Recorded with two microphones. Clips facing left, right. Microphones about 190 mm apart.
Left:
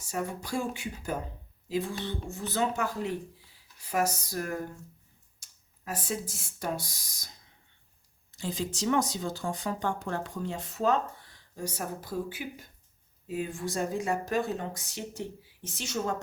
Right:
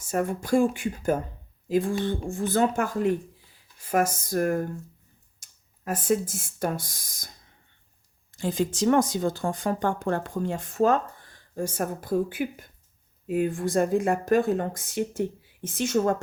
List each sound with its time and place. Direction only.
0.0 s speech: 50° right (ahead or behind)
8.3 s speech: 50° right (ahead or behind)